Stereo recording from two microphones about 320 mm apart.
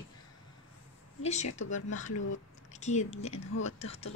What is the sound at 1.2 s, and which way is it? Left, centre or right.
A woman's voice, left.